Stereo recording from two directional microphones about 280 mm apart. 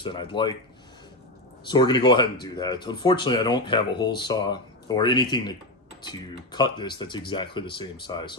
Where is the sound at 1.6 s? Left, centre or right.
Centre.